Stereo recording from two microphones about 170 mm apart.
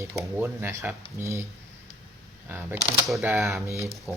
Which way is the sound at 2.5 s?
10° right (ahead or behind).